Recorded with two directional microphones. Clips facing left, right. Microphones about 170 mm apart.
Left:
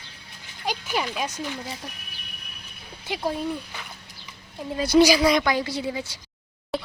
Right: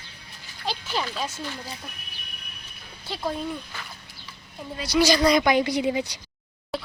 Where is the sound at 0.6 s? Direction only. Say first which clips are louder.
Left 2 dB; 15° left (ahead or behind).